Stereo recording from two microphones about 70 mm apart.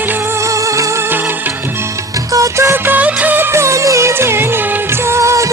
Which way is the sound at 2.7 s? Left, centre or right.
Right.